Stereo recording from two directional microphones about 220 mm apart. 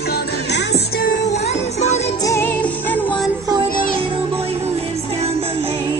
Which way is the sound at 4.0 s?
25° right (ahead or behind).